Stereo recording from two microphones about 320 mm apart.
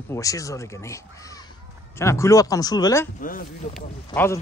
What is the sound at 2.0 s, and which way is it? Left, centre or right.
Speech, centre.